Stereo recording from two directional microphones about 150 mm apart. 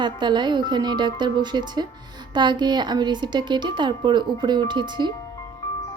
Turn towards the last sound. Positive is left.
turn(degrees=-30)  # may be behind; listen again after turning